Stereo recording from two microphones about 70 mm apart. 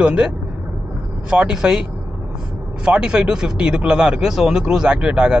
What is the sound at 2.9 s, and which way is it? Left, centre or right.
Speech, centre.